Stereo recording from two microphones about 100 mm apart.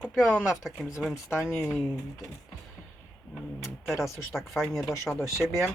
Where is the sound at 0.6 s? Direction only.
Centre (ahead or behind).